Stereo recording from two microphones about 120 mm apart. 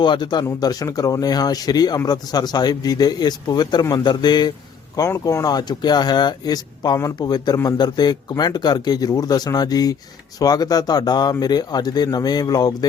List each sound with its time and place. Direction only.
0.0 s speech: 40° left (ahead or behind)